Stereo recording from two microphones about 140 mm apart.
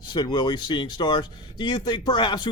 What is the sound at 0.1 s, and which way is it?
Speech, 30° left (ahead or behind).